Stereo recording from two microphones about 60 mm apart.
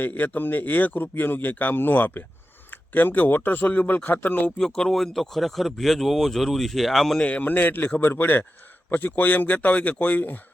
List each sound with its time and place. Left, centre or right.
0.0 s speech: left
4.5 s speech: centre
7.2 s speech: left